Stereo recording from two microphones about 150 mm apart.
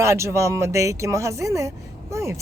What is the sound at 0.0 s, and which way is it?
Speech, 20° right (ahead or behind).